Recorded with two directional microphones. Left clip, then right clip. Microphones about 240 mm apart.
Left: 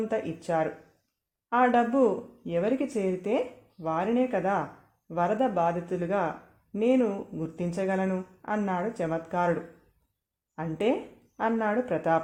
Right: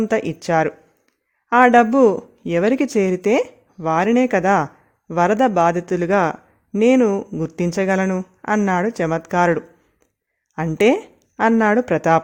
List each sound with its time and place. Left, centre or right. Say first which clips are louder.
0.1 s a woman's voice: right 10 dB; right